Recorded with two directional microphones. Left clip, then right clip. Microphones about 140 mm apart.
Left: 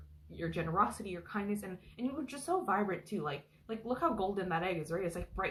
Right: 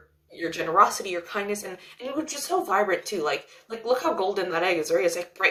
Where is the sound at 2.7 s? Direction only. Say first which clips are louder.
Right 11 dB; 15° right (ahead or behind).